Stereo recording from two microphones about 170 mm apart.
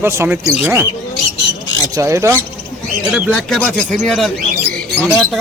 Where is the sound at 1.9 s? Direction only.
15° right (ahead or behind).